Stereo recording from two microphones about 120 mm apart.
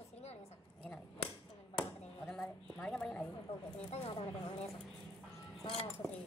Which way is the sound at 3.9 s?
60° left (ahead or behind).